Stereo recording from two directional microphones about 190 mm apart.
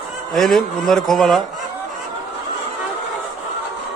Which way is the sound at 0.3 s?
Centre (ahead or behind).